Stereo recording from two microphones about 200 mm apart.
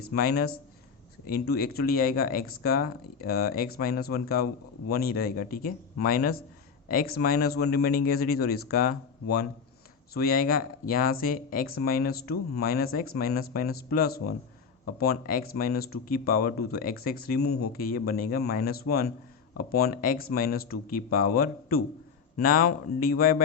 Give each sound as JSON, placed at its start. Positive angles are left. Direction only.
{"t": 0.1, "sound": "speech", "side_deg": 50}